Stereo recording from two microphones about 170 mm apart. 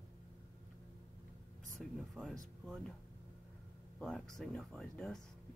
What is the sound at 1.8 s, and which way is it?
Speech, centre (ahead or behind).